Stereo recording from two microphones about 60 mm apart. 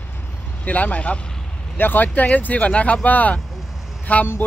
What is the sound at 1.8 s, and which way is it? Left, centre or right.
Speech, left.